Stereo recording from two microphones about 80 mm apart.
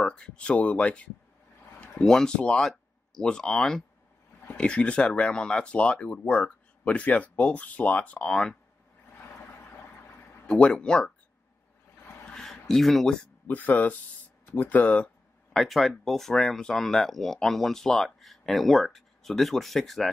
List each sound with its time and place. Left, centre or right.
0.0 s speech: centre
9.2 s a sound: left
10.4 s speech: centre
12.3 s speech: centre
13.5 s speech: left
15.5 s speech: centre